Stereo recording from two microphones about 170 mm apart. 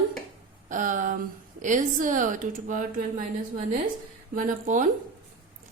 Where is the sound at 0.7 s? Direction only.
50° right (ahead or behind).